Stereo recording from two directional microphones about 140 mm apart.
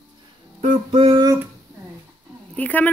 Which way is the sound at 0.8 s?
35° right (ahead or behind).